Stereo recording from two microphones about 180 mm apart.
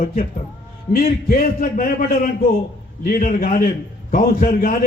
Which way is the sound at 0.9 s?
50° left (ahead or behind).